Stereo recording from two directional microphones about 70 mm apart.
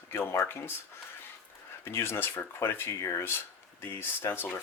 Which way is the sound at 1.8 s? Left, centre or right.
Left.